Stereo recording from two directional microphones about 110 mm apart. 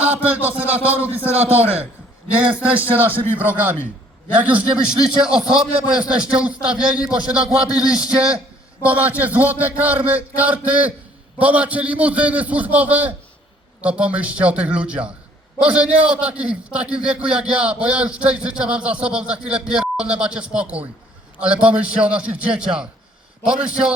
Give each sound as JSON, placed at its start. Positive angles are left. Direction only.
{"t": 0.0, "sound": "music", "side_deg": -15}
{"t": 0.6, "sound": "a man's voice", "side_deg": -15}